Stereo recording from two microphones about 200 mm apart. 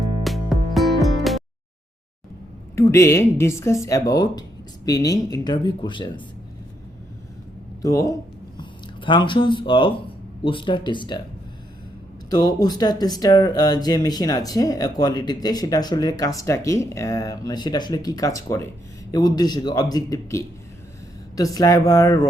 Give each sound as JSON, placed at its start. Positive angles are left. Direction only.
{"t": 0.3, "sound": "music", "side_deg": 0}
{"t": 2.7, "sound": "a woman's voice", "side_deg": 15}
{"t": 7.8, "sound": "speech", "side_deg": 15}
{"t": 12.3, "sound": "a woman's voice", "side_deg": 20}